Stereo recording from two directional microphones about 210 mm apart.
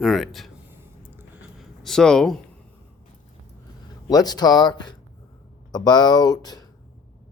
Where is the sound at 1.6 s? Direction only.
Centre (ahead or behind).